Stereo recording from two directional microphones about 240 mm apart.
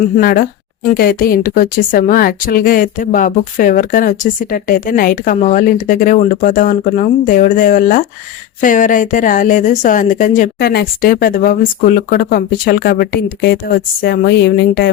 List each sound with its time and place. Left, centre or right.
0.2 s speech: left